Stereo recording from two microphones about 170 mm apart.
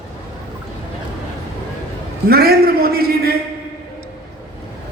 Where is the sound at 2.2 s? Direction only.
65° right (ahead or behind).